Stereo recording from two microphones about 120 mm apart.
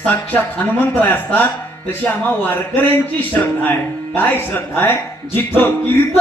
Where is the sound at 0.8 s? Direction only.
15° left (ahead or behind).